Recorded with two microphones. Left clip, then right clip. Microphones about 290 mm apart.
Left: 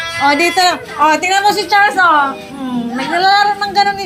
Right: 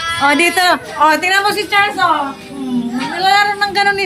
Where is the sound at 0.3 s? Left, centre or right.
Centre.